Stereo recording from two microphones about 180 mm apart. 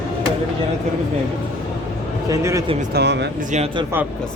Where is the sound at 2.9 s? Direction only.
70° right (ahead or behind).